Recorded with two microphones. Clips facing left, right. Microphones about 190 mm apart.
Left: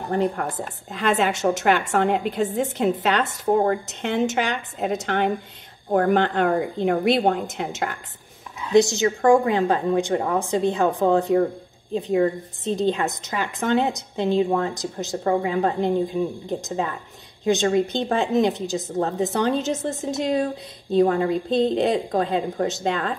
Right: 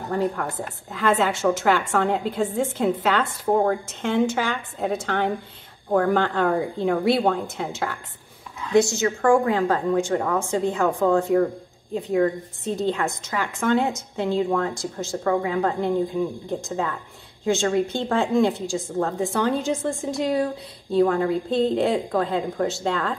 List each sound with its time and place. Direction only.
0.1 s a woman's voice: 20° left (ahead or behind)